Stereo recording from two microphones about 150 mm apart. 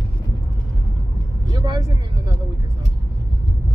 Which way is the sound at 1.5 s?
20° right (ahead or behind).